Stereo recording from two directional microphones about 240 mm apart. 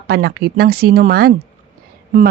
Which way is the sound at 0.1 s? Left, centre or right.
Right.